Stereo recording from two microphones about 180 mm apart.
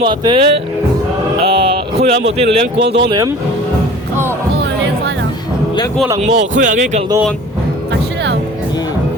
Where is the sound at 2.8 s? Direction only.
75° right (ahead or behind).